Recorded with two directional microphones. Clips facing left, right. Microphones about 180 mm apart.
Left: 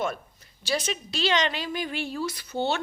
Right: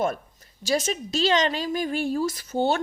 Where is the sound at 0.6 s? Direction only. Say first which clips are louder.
Right 4 dB; 45° right (ahead or behind).